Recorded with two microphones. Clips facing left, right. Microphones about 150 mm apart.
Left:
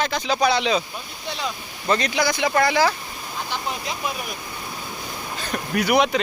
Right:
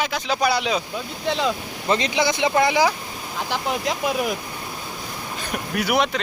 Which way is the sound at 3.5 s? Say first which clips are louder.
Right 6 dB; 70° right (ahead or behind).